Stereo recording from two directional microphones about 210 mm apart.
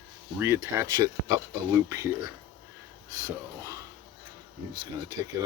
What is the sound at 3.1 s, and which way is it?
Speech, 15° right (ahead or behind).